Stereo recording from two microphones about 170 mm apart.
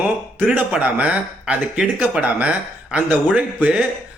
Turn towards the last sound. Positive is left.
turn(degrees=-5)  # may be behind; listen again after turning